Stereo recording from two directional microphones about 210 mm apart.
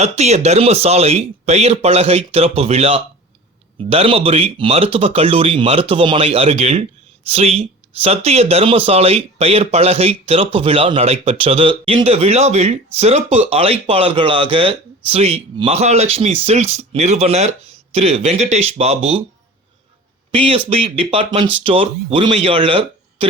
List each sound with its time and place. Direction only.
0.0 s speech: 30° right (ahead or behind)
20.3 s speech: 25° right (ahead or behind)